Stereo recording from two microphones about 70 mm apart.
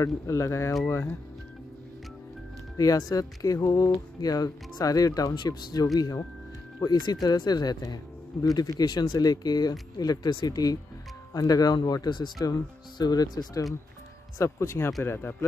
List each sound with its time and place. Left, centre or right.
0.0 s speech: left
0.8 s speech: left
2.8 s speech: left
14.4 s speech: left